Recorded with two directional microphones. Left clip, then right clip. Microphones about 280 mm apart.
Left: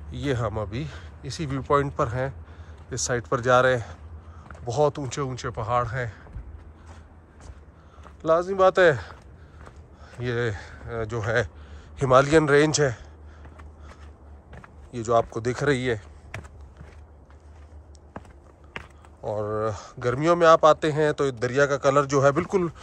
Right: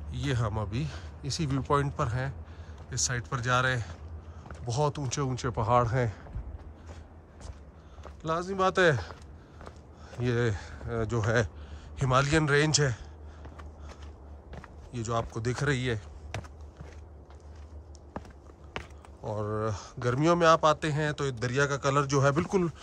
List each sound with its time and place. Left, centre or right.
0.1 s speech: centre; by 6.2 s right
8.0 s speech: centre
14.9 s speech: centre
18.7 s speech: centre